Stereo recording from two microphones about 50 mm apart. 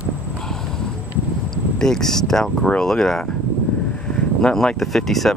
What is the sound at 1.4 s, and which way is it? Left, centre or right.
Speech, centre.